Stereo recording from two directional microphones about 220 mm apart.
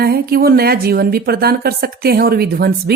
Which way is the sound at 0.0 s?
45° right (ahead or behind).